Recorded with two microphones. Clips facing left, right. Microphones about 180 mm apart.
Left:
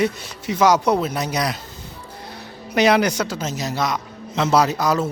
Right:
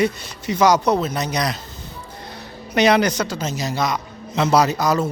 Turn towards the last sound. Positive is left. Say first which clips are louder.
# right 1 dB
turn(degrees=0)  # may be behind; listen again after turning